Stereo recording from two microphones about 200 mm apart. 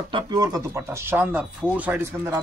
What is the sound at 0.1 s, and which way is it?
A man's voice, 20° right (ahead or behind).